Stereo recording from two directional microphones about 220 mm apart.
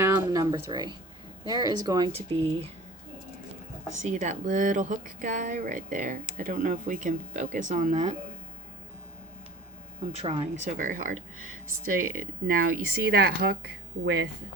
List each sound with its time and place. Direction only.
0.0 s music: 15° right (ahead or behind)
1.5 s speech: 20° right (ahead or behind)
3.9 s speech: 35° right (ahead or behind)
10.2 s speech: 25° right (ahead or behind)
10.7 s speech: 35° right (ahead or behind)